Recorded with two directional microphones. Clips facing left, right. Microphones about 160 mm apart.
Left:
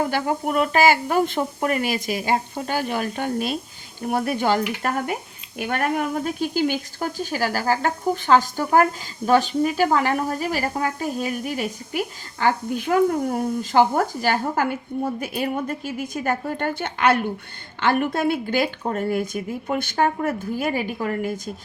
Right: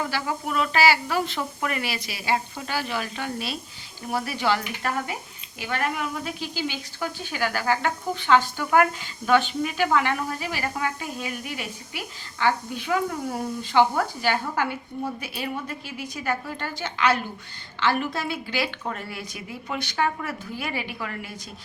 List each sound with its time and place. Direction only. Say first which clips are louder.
0.0 s speech: left 6 dB; 50° left (ahead or behind)